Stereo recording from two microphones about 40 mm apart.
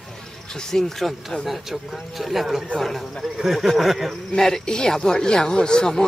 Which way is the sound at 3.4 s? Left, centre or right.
Centre.